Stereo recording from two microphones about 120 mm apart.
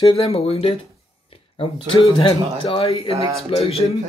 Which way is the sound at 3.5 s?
55° left (ahead or behind).